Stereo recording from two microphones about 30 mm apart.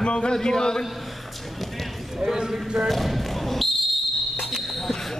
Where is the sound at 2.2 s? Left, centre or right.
Centre.